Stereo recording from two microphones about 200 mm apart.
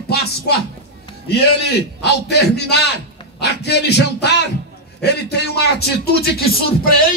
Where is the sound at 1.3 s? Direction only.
55° left (ahead or behind).